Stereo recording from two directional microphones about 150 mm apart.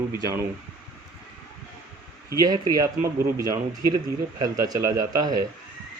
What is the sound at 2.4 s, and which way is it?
Speech, 25° right (ahead or behind).